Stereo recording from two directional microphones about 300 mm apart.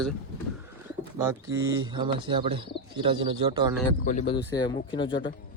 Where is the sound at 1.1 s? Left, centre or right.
Centre.